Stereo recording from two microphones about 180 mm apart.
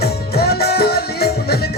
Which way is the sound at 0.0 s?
60° left (ahead or behind).